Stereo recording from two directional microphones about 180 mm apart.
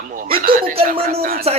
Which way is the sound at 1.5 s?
35° right (ahead or behind).